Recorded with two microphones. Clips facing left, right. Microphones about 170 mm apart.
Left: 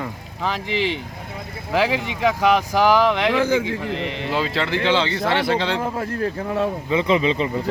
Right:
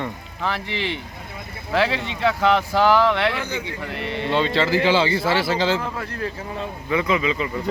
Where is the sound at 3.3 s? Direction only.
90° left.